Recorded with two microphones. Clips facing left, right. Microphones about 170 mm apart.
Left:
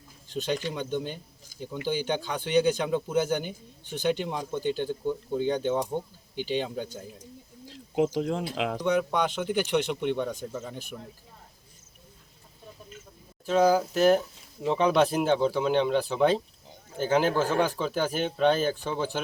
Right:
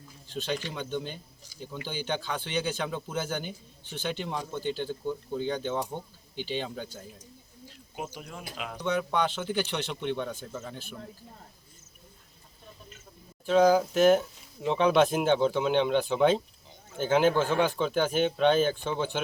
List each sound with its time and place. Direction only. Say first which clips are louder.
0.3 s speech: left 3 dB; 15° left (ahead or behind)
7.7 s speech: left 13 dB; 90° left
8.8 s speech: left 1 dB; 5° left (ahead or behind)
13.5 s speech: right 1 dB; 5° left (ahead or behind)